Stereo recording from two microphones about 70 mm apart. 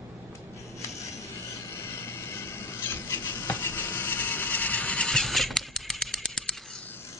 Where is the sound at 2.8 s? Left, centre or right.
Left; by 6.5 s centre.